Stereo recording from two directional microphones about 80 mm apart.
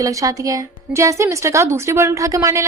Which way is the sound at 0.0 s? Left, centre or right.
Right.